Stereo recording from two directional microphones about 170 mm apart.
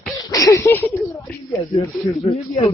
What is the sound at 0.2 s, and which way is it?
Speech, 20° left (ahead or behind).